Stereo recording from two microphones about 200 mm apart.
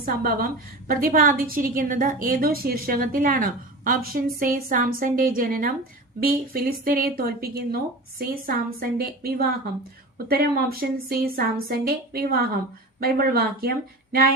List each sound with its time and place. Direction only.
0.0 s a woman's voice: 45° right (ahead or behind)